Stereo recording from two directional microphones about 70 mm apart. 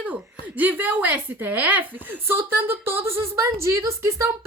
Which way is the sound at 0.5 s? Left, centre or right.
Right.